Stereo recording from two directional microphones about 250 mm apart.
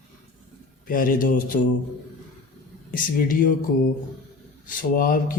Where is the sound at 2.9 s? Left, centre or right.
Left.